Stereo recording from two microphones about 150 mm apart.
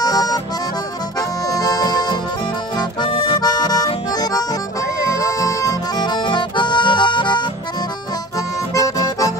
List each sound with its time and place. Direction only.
0.0 s accordion: 25° left (ahead or behind)
8.4 s music: 20° left (ahead or behind)